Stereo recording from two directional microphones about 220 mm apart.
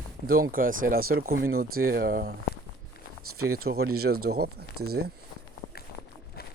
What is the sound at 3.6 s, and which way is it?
Speech, 45° right (ahead or behind).